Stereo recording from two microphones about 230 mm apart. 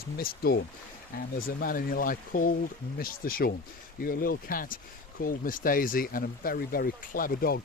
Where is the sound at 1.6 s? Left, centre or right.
Left.